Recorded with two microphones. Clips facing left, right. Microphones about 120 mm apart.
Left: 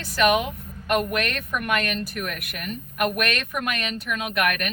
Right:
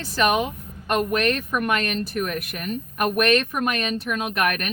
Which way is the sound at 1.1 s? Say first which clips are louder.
Right 4 dB; 35° right (ahead or behind).